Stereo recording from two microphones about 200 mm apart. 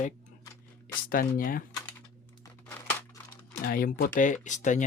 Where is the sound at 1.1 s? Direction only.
45° left (ahead or behind).